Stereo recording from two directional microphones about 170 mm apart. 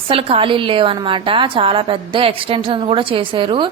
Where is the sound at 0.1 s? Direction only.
35° right (ahead or behind).